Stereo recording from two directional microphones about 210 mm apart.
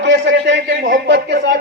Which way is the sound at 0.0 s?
55° right (ahead or behind).